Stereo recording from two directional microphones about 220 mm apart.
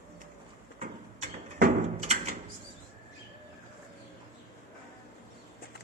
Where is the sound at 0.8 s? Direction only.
30° right (ahead or behind).